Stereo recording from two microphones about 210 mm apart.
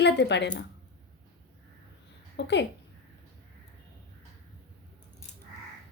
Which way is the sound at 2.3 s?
55° left (ahead or behind).